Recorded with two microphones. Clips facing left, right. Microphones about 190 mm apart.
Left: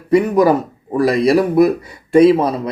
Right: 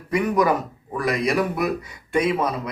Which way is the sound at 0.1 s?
30° left (ahead or behind).